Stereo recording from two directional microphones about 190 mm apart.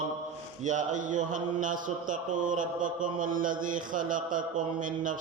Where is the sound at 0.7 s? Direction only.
40° right (ahead or behind).